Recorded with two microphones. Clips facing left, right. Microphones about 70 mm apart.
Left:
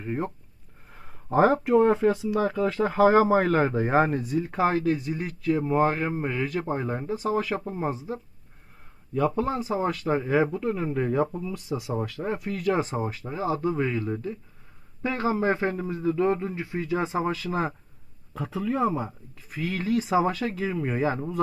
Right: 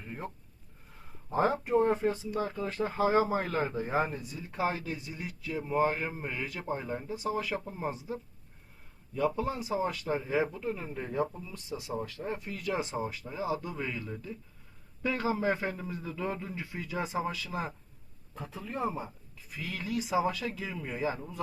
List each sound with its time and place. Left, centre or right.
0.0 s speech: left
7.6 s a man's voice: left
9.1 s a man's voice: left
17.2 s speech: left
18.3 s speech: left